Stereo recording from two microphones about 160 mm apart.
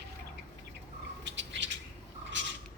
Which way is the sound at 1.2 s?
90° right.